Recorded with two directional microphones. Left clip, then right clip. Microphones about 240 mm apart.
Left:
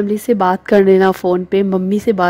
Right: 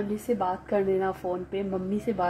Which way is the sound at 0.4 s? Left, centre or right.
Left.